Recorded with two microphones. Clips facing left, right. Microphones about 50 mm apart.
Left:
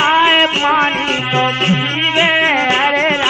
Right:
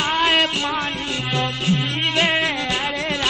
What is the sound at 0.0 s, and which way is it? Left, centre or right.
Music, left.